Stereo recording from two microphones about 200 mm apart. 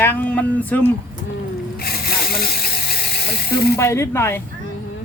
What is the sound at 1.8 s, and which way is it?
Squeal, 50° left (ahead or behind).